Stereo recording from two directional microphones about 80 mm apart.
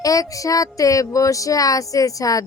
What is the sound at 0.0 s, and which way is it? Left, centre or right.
Speech, left.